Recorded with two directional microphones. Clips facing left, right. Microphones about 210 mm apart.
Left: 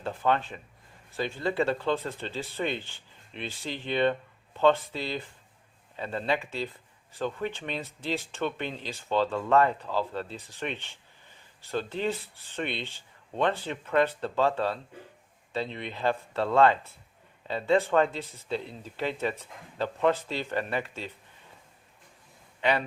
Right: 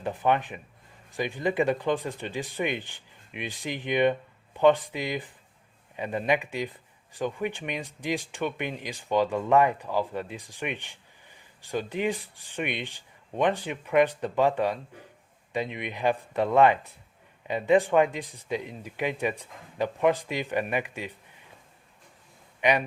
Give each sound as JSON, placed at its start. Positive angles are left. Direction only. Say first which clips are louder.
{"t": 0.0, "sound": "speech", "louder": "right 2 dB", "side_deg": -15}
{"t": 22.6, "sound": "speech", "louder": "right 2 dB", "side_deg": -15}